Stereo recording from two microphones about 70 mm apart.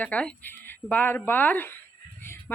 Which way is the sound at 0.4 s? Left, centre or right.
Left.